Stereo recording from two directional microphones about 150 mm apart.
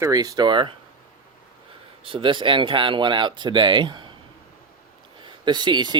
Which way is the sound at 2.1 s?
35° right (ahead or behind).